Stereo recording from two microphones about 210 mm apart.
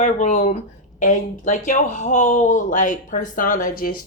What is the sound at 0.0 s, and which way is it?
Speech, 35° left (ahead or behind).